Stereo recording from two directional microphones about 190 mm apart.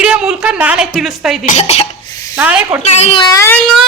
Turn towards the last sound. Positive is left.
turn(degrees=15)  # may be behind; listen again after turning